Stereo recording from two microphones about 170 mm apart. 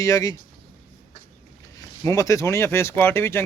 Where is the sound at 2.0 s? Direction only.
20° left (ahead or behind).